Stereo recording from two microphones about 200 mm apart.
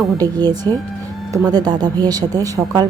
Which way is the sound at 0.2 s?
20° right (ahead or behind).